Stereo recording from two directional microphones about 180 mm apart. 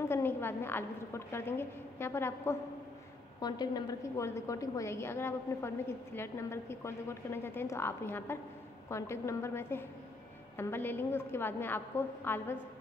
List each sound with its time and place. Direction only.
0.1 s a woman's voice: 10° left (ahead or behind)